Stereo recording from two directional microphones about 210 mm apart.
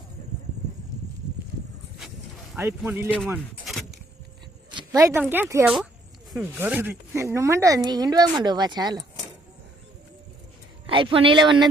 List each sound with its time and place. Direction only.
2.6 s speech: 10° right (ahead or behind)
4.7 s a sound: 20° right (ahead or behind)
5.3 s a woman's voice: 10° right (ahead or behind)
10.8 s a woman's voice: 25° right (ahead or behind)